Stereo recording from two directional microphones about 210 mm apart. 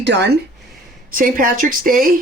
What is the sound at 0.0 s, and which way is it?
Speech, 55° right (ahead or behind).